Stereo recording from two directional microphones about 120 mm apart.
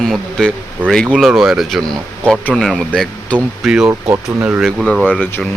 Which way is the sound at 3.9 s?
25° right (ahead or behind).